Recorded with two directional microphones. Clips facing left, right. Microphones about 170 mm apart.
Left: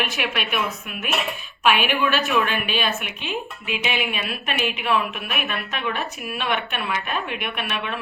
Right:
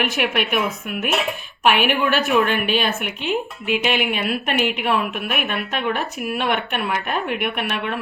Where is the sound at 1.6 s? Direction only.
60° right (ahead or behind).